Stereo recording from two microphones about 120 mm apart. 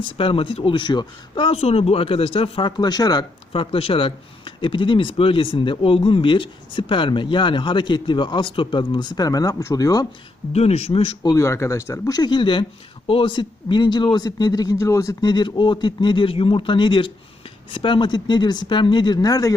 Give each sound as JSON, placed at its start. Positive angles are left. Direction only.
{"t": 0.0, "sound": "speech", "side_deg": 50}
{"t": 1.5, "sound": "speech", "side_deg": 60}
{"t": 3.5, "sound": "speech", "side_deg": 50}
{"t": 10.5, "sound": "speech", "side_deg": 60}
{"t": 11.2, "sound": "speech", "side_deg": 30}